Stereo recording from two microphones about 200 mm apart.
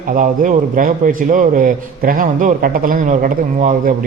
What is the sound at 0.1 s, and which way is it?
A man's voice, 40° right (ahead or behind).